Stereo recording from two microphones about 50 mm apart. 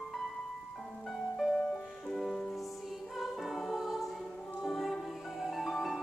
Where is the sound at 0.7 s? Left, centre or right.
Centre.